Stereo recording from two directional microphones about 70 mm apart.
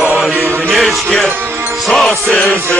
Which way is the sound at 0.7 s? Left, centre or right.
Centre.